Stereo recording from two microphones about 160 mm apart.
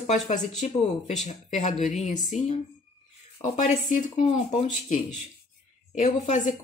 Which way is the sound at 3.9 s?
45° left (ahead or behind).